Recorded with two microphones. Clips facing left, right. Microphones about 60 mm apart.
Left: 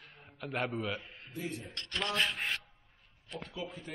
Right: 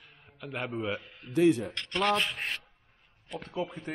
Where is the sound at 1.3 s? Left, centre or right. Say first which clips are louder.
Right 17 dB; right.